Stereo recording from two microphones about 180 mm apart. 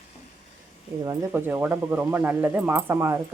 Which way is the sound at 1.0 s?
20° right (ahead or behind).